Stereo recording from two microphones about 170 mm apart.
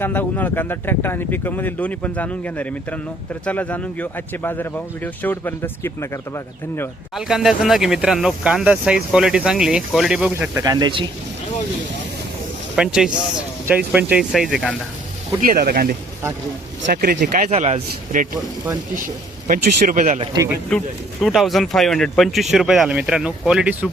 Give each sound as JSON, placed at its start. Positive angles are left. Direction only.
{"t": 0.0, "sound": "speech", "side_deg": 10}
{"t": 7.2, "sound": "speech", "side_deg": -5}
{"t": 10.6, "sound": "speech", "side_deg": -20}
{"t": 12.7, "sound": "speech", "side_deg": -5}
{"t": 15.4, "sound": "speech", "side_deg": -60}
{"t": 17.5, "sound": "a man's voice", "side_deg": -40}
{"t": 20.7, "sound": "speech", "side_deg": 0}